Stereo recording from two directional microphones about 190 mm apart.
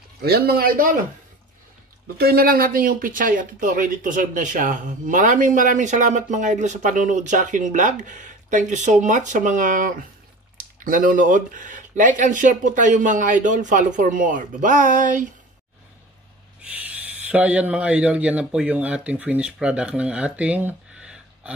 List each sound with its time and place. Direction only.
0.2 s speech: 55° right (ahead or behind)
2.1 s speech: 55° right (ahead or behind)
16.8 s speech: 5° right (ahead or behind)